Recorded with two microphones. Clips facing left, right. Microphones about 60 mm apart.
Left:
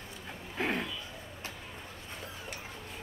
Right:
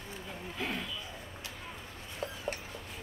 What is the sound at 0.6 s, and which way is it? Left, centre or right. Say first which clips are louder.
Speech: left 5 dB; left.